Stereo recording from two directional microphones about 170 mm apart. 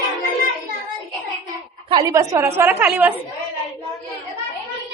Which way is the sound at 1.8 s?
20° right (ahead or behind).